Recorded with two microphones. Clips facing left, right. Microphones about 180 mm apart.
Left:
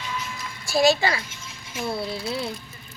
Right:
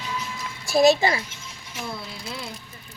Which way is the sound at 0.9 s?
25° right (ahead or behind).